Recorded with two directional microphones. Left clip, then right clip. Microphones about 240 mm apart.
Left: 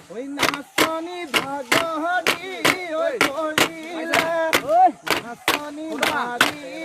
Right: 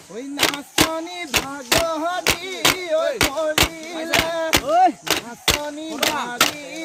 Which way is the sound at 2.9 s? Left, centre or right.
Right.